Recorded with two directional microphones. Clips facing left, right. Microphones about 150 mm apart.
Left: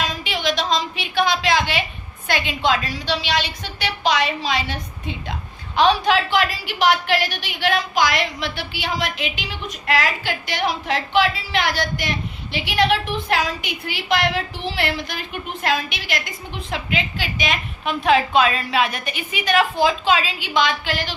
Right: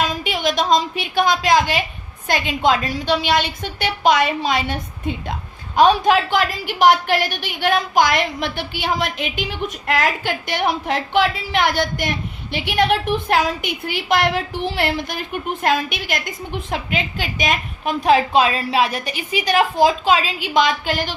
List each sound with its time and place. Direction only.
0.1 s a woman's voice: 45° right (ahead or behind)